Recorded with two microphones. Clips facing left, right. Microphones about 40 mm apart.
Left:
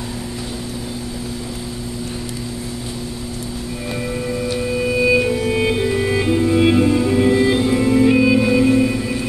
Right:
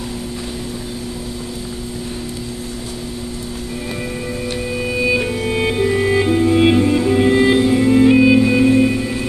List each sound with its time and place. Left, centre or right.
5.0 s music: centre
6.5 s music: right
7.5 s music: centre